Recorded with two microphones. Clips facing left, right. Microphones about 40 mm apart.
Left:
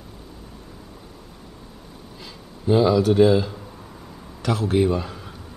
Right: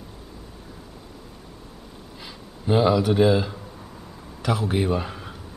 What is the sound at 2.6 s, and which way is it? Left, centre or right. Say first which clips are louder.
A man's voice: left 2 dB; centre.